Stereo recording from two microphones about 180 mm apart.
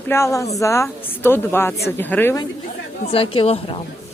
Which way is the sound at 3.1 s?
30° left (ahead or behind).